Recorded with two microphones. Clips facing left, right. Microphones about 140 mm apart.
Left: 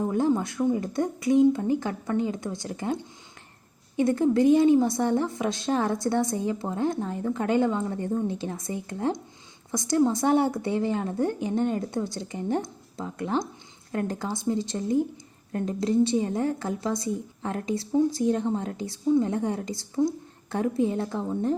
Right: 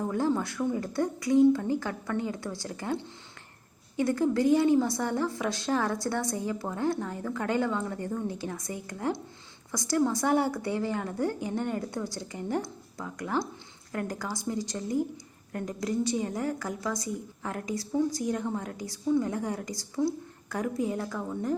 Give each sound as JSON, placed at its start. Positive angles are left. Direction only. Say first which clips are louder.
{"t": 0.0, "sound": "a woman's voice", "louder": "left 4 dB", "side_deg": 20}